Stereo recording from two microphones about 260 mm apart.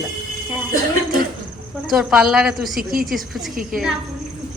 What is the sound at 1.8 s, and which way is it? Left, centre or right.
A woman's voice, centre.